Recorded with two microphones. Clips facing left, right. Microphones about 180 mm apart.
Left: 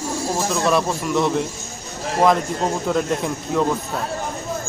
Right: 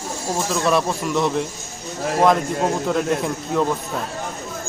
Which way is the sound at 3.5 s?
Centre (ahead or behind).